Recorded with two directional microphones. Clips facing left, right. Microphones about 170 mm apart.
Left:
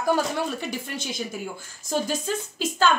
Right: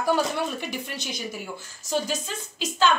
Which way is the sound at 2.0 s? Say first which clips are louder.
Left 4 dB; 50° left (ahead or behind).